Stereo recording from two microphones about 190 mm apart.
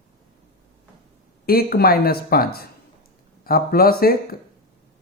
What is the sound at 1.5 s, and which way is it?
Speech, 55° left (ahead or behind).